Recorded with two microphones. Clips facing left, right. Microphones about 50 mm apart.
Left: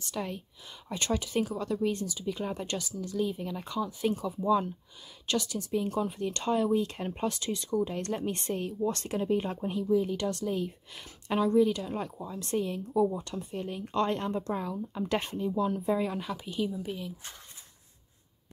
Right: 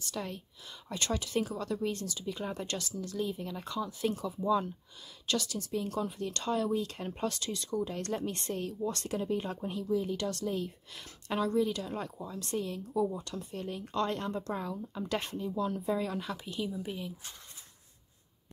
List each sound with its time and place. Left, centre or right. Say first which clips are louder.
0.0 s a woman's voice: left 3 dB; centre
8.8 s a woman's voice: left 4 dB; left; by 12.1 s centre
12.2 s speech: left 2 dB; left
12.4 s speech: left 5 dB; left
13.1 s a woman's voice: left 3 dB; left
13.9 s speech: left 4 dB; left
14.5 s a woman's voice: left 3 dB; centre
15.0 s speech: left 4 dB; left
16.2 s a woman's voice: left 4 dB; centre
16.7 s speech: left 2 dB; centre